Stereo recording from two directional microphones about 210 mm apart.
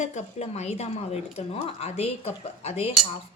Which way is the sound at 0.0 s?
30° left (ahead or behind).